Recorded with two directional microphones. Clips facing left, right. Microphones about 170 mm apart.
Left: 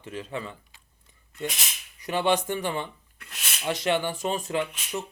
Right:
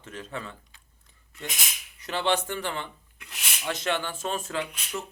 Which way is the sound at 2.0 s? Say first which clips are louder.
Left 2 dB; 15° left (ahead or behind).